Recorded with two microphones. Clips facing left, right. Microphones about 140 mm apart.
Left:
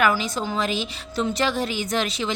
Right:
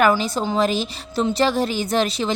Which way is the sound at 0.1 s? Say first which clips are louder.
Right 5 dB; 30° right (ahead or behind).